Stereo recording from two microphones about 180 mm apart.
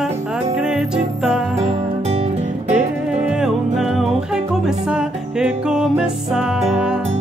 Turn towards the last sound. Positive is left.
turn(degrees=-5)  # may be behind; listen again after turning